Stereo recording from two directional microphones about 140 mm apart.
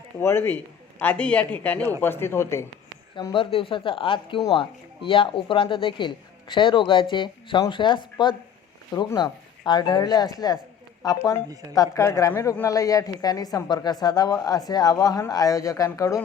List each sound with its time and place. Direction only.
0.2 s a man's voice: 15° left (ahead or behind)
3.2 s speech: 35° left (ahead or behind)